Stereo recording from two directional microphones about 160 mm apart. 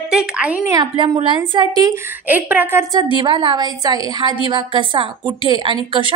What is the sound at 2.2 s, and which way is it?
A woman's voice, 10° right (ahead or behind).